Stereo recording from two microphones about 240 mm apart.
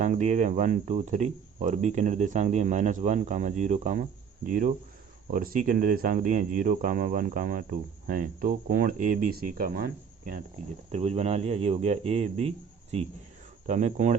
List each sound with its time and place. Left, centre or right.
0.0 s speech: right
5.3 s speech: right
10.9 s speech: right